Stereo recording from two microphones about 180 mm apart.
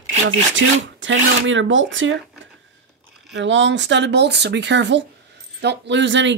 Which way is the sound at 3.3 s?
85° right.